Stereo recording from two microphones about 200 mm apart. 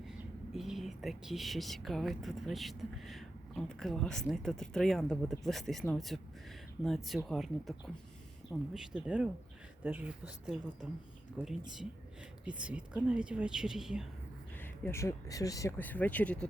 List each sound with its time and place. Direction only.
0.5 s speech: centre (ahead or behind)
14.6 s speech: 15° left (ahead or behind)